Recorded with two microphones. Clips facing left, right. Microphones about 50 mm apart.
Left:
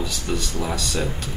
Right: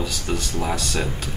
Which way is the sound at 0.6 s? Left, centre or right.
Right.